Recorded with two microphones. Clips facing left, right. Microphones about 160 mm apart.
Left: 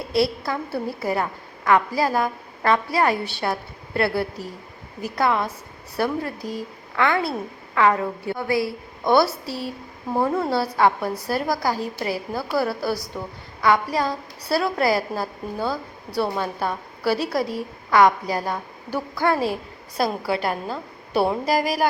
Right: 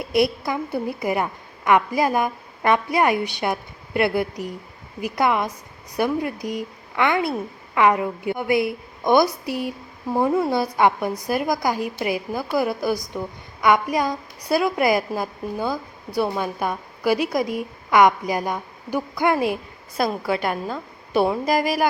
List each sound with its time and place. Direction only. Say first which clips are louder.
0.1 s a woman's voice: right 1 dB; 15° right (ahead or behind)
20.3 s speech: right 1 dB; 35° left (ahead or behind)